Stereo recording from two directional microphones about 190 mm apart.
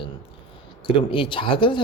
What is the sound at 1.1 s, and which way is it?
Speech, 25° left (ahead or behind).